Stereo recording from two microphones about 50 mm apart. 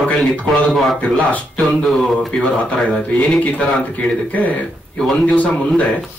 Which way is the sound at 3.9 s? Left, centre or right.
Left.